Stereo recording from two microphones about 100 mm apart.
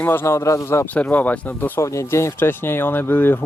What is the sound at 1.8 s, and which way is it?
Speech, 30° left (ahead or behind).